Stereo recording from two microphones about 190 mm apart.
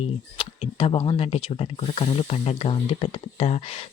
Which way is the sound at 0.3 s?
25° left (ahead or behind).